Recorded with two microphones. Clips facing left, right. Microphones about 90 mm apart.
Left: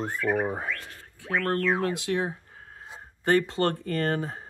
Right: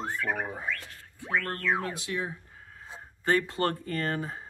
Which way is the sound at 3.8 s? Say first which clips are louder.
Left 4 dB; 60° left (ahead or behind).